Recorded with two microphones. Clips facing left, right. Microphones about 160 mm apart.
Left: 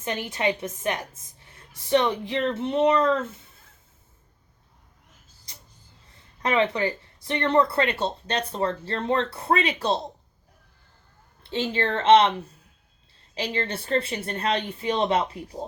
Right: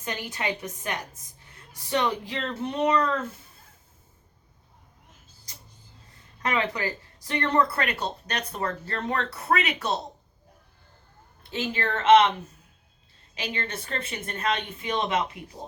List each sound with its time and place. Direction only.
0.0 s speech: 25° left (ahead or behind)
6.4 s speech: 25° left (ahead or behind)
11.5 s speech: 30° left (ahead or behind)
13.3 s speech: 30° left (ahead or behind)